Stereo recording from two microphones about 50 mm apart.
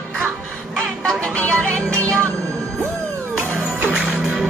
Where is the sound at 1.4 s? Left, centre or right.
Left.